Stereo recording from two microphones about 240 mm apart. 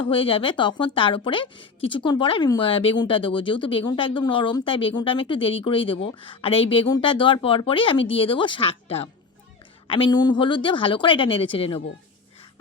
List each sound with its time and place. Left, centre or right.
0.0 s speech: left